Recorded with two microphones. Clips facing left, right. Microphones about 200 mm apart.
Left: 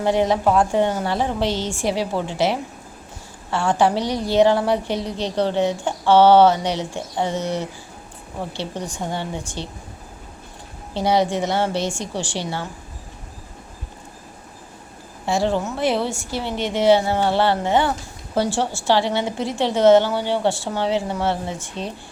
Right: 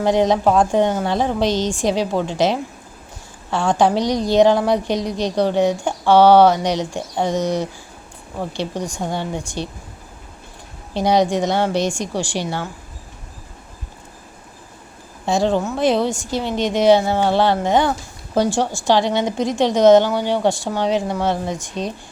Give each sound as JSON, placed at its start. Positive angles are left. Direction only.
{"t": 0.0, "sound": "a woman's voice", "side_deg": -15}
{"t": 10.9, "sound": "a woman's voice", "side_deg": -15}
{"t": 15.5, "sound": "a woman's voice", "side_deg": -15}